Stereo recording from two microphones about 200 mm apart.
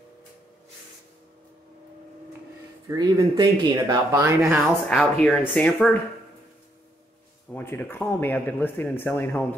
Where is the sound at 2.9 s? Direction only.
15° right (ahead or behind).